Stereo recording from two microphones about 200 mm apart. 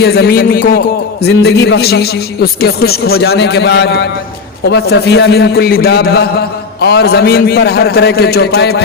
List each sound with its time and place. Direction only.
0.0 s a man's voice: 55° left (ahead or behind)